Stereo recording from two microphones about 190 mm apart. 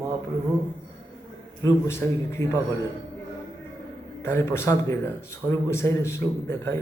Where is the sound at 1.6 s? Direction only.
15° left (ahead or behind).